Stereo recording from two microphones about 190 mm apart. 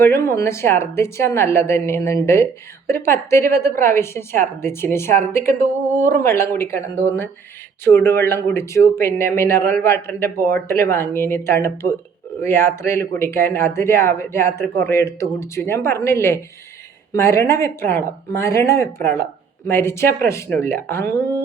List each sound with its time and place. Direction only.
0.0 s a woman's voice: 15° left (ahead or behind)